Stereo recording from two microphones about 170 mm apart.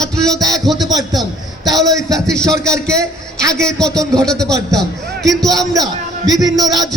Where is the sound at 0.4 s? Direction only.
Centre (ahead or behind).